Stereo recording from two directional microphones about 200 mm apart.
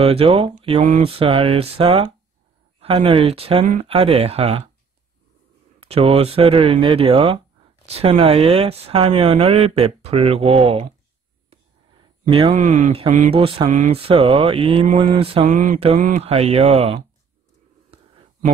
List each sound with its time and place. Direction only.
0.0 s speech: 30° right (ahead or behind)
5.8 s speech: 30° right (ahead or behind)
12.3 s speech: 25° right (ahead or behind)
12.5 s speech: 40° right (ahead or behind)
15.5 s speech: 40° right (ahead or behind)